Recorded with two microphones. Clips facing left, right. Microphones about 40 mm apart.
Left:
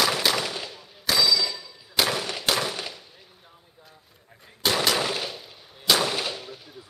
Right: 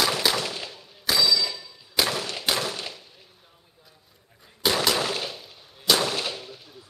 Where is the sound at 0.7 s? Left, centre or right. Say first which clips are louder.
Even; centre.